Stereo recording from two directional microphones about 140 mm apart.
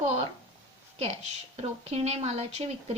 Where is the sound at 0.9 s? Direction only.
50° right (ahead or behind).